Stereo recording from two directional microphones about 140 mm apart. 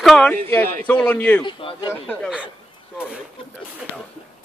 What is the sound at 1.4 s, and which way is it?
Speech, 35° left (ahead or behind).